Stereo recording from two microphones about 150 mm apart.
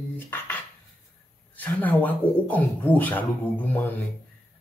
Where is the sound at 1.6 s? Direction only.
10° left (ahead or behind).